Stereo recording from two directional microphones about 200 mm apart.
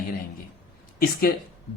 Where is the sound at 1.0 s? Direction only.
45° left (ahead or behind).